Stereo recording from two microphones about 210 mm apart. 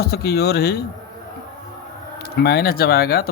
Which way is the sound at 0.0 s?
50° left (ahead or behind).